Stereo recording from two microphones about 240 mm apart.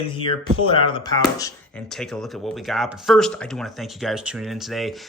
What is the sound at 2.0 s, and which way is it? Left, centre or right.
Speech, centre.